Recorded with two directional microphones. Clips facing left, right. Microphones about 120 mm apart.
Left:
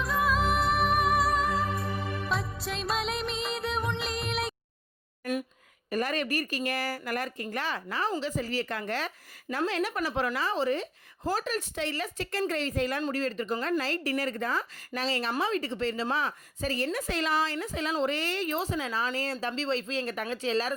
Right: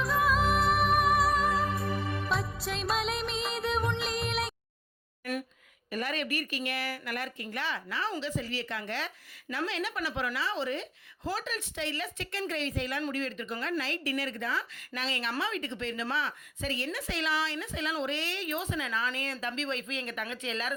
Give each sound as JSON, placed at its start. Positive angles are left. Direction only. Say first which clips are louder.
{"t": 0.0, "sound": "music", "louder": "even", "side_deg": 0}
{"t": 5.9, "sound": "a woman's voice", "louder": "left 4 dB", "side_deg": 40}